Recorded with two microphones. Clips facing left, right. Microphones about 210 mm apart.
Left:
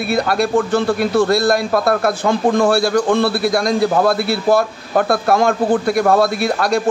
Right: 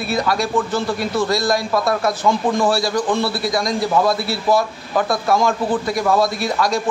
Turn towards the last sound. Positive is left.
turn(degrees=60)  # may be behind; listen again after turning